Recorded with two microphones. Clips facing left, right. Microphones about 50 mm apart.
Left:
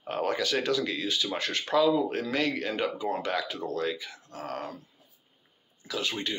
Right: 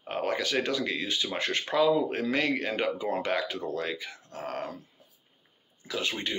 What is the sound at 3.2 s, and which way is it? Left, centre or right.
Speech, right.